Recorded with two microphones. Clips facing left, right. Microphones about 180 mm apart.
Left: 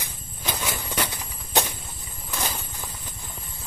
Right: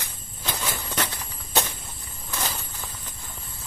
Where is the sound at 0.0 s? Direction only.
10° left (ahead or behind).